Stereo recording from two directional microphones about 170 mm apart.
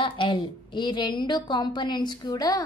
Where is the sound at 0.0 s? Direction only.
30° left (ahead or behind).